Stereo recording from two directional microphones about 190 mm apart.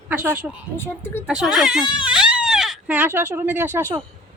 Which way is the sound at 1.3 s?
5° right (ahead or behind).